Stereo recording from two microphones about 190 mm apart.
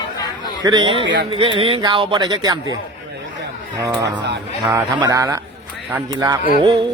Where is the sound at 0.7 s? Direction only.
25° right (ahead or behind).